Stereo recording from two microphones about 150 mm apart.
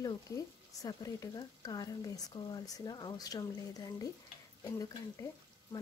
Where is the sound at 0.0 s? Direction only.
25° left (ahead or behind).